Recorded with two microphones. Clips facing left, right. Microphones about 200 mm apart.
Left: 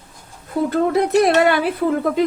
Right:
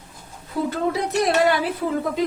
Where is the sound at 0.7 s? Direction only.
60° left (ahead or behind).